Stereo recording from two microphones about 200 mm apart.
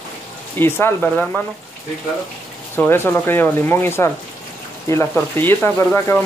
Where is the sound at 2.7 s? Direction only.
10° left (ahead or behind).